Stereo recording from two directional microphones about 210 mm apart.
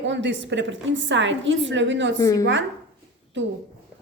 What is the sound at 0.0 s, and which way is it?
A woman's voice, 60° right (ahead or behind).